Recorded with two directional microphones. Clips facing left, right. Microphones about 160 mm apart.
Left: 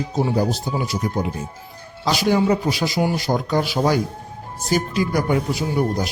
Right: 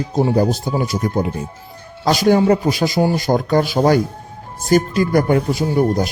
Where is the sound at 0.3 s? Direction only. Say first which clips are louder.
Right 4 dB; 50° right (ahead or behind).